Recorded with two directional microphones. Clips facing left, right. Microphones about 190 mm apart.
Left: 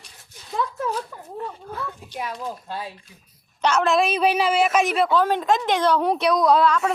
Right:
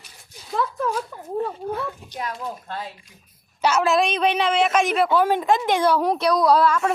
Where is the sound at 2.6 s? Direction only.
10° left (ahead or behind).